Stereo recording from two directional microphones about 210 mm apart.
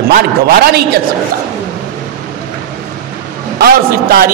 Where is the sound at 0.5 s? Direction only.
50° right (ahead or behind).